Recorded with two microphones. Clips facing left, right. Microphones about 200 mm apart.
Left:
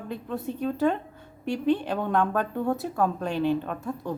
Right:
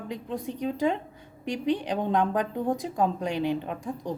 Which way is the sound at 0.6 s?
15° right (ahead or behind).